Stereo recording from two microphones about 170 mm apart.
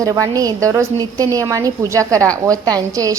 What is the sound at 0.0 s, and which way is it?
A woman's voice, 20° right (ahead or behind).